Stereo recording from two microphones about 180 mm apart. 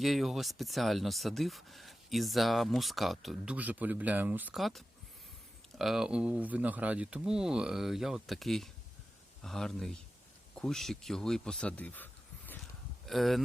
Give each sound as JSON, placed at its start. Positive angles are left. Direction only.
{"t": 0.0, "sound": "speech", "side_deg": 0}
{"t": 13.1, "sound": "speech", "side_deg": 0}